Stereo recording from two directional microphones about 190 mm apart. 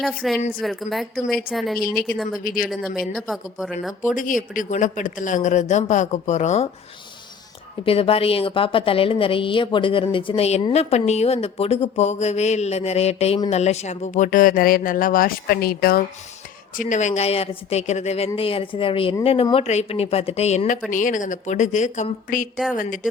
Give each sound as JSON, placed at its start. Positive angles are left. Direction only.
{"t": 0.0, "sound": "a woman's voice", "side_deg": 0}
{"t": 1.8, "sound": "a woman's voice", "side_deg": 50}
{"t": 2.6, "sound": "a woman's voice", "side_deg": 0}
{"t": 4.0, "sound": "a woman's voice", "side_deg": 45}
{"t": 7.9, "sound": "a woman's voice", "side_deg": 30}